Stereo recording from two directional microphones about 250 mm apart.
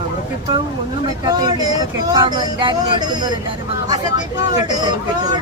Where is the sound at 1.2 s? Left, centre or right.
Centre.